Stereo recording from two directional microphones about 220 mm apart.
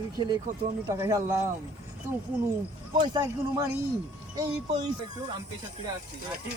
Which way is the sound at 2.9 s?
15° right (ahead or behind).